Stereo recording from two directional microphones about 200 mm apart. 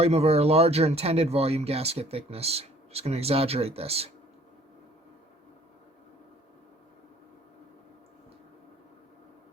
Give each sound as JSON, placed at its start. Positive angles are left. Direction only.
{"t": 0.0, "sound": "speech", "side_deg": -30}